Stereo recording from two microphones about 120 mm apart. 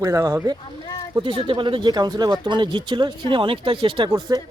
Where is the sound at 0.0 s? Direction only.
25° right (ahead or behind).